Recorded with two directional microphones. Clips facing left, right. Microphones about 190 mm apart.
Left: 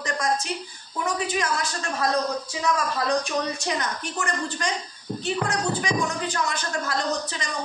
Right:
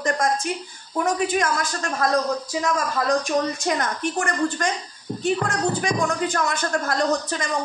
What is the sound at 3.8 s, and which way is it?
A woman's voice, 50° right (ahead or behind).